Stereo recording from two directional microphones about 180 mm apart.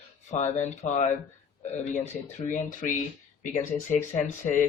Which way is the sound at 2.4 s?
45° left (ahead or behind).